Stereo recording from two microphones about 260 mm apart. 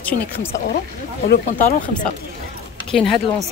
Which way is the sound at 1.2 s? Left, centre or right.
Left.